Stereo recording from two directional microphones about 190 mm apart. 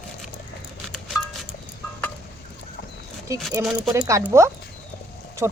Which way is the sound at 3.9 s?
15° right (ahead or behind).